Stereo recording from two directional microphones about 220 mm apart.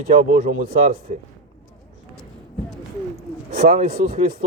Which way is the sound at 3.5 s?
30° right (ahead or behind).